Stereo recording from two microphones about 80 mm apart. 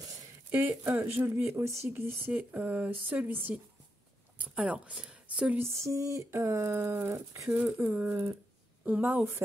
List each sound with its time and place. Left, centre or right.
0.5 s speech: right
1.5 s speech: right; by 5.6 s centre
5.6 s speech: right
7.5 s a woman's voice: centre